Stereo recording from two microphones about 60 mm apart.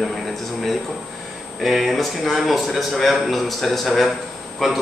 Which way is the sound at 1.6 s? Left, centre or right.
Centre.